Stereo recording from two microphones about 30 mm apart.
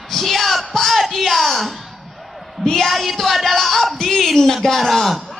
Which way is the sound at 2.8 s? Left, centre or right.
Centre.